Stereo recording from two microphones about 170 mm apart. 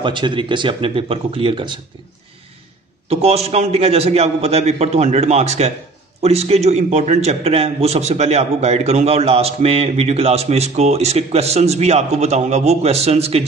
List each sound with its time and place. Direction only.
0.0 s speech: 30° right (ahead or behind)
3.1 s a man's voice: 35° right (ahead or behind)